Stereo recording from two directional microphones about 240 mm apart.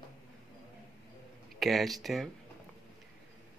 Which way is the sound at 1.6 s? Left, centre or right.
Centre.